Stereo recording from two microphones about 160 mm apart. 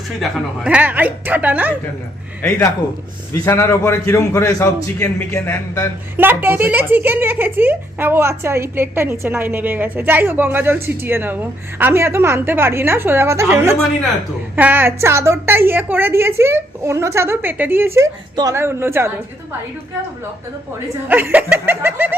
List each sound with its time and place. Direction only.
0.2 s a woman's voice: 5° right (ahead or behind)
3.3 s a man's voice: 15° left (ahead or behind)
6.1 s a woman's voice: 15° right (ahead or behind)
21.1 s a woman's voice: 10° right (ahead or behind)